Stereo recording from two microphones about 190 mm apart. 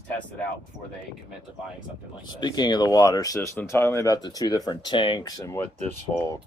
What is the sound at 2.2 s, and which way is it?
Speech, 20° left (ahead or behind).